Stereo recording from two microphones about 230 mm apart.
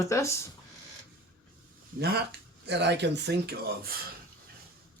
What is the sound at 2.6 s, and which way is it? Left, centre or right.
Speech, right.